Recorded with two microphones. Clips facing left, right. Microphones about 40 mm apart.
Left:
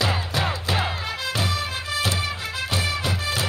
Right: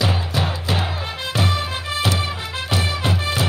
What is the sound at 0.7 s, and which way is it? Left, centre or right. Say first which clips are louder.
Music: right 1 dB; right.